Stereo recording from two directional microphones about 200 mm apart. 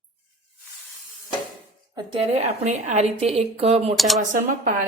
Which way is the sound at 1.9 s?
25° right (ahead or behind).